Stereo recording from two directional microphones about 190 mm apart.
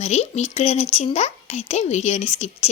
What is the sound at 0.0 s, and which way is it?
Speech, 35° left (ahead or behind).